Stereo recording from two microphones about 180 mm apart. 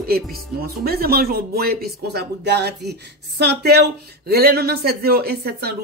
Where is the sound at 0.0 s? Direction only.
60° right (ahead or behind).